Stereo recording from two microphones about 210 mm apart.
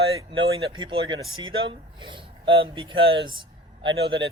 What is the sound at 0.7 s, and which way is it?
Speech, 20° right (ahead or behind).